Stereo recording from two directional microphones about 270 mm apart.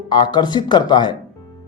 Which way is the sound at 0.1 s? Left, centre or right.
Centre.